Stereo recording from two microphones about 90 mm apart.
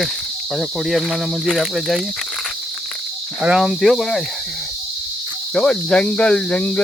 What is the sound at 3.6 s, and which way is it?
Speech, centre (ahead or behind).